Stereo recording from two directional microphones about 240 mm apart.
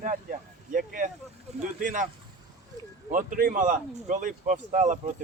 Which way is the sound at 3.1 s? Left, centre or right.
Right.